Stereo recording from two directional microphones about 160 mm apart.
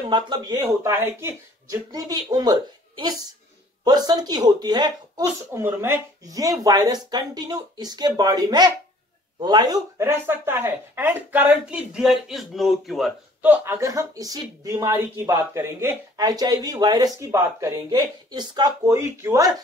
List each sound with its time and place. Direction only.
0.1 s a woman's voice: 25° right (ahead or behind)
0.6 s a woman's voice: 15° right (ahead or behind)
5.5 s a woman's voice: 15° right (ahead or behind); by 13.1 s centre (ahead or behind)
13.4 s a woman's voice: 10° right (ahead or behind)